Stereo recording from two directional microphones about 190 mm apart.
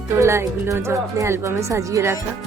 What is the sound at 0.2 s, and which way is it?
Speech, 15° right (ahead or behind).